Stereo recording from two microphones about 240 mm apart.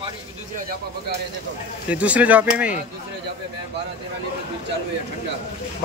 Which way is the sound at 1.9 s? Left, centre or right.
Centre.